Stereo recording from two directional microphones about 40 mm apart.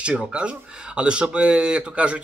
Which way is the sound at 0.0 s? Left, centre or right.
Right.